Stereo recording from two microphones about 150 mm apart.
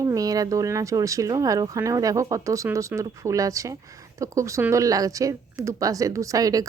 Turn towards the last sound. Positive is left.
turn(degrees=-25)  # may be behind; listen again after turning